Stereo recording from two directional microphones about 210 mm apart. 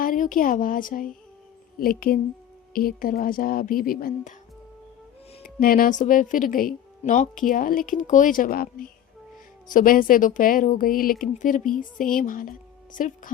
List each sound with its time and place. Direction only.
0.0 s speech: 40° left (ahead or behind)
5.4 s speech: 45° left (ahead or behind)